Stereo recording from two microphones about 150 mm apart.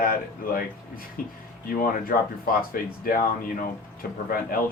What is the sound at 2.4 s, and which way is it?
A man's voice, 75° left (ahead or behind).